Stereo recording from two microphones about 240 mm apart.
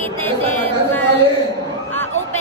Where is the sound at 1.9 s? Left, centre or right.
Centre.